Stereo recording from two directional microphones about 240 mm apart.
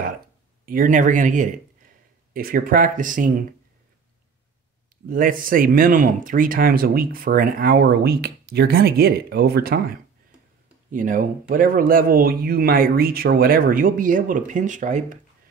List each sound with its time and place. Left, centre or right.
0.7 s a man's voice: right
5.1 s speech: right